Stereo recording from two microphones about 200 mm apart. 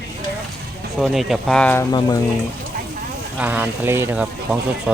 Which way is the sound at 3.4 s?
10° right (ahead or behind).